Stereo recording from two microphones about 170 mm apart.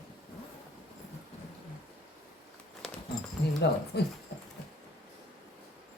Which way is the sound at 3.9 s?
85° left.